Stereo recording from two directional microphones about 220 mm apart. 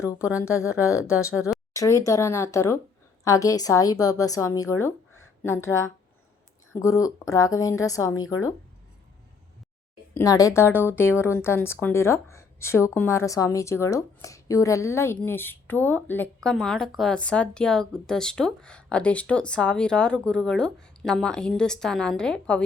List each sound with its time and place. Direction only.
0.4 s a woman's voice: 15° left (ahead or behind)
8.1 s speech: 70° left (ahead or behind)
10.2 s a woman's voice: 15° left (ahead or behind)